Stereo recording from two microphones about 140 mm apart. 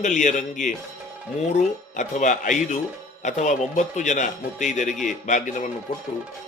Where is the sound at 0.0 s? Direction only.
60° left (ahead or behind).